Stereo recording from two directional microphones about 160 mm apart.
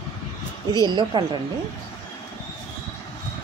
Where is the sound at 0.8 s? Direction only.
30° right (ahead or behind).